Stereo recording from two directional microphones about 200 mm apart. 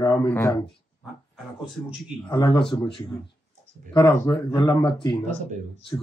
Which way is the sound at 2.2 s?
25° left (ahead or behind).